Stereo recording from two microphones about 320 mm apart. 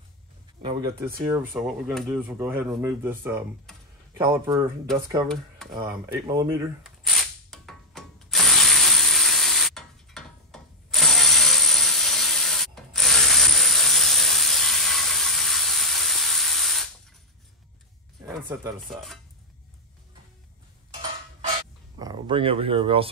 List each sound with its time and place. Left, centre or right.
0.6 s speech: centre
1.6 s speech: centre
5.8 s a sound: centre
18.2 s speech: centre
21.9 s speech: centre